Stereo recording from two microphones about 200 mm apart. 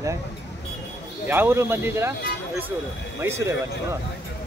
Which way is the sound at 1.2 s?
10° right (ahead or behind).